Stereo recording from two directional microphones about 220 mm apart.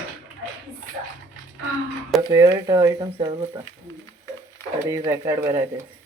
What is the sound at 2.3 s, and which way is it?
A woman's voice, 20° right (ahead or behind).